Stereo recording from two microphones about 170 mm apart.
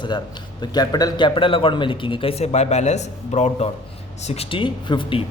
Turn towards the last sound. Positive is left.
turn(degrees=30)  # may be behind; listen again after turning